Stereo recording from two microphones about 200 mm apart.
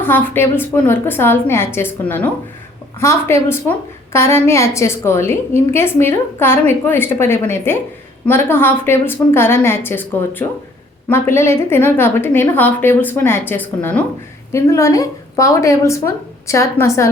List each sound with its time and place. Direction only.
0.0 s a woman's voice: 10° left (ahead or behind)